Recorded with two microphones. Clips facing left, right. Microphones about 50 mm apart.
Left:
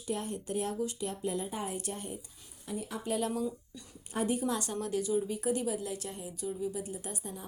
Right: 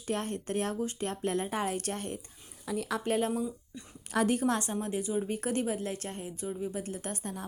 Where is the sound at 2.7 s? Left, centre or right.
Right.